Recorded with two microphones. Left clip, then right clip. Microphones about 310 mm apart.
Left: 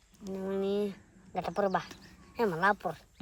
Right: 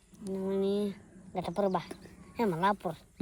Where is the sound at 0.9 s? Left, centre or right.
Centre.